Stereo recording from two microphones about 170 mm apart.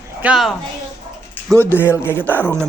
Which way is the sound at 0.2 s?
5° right (ahead or behind).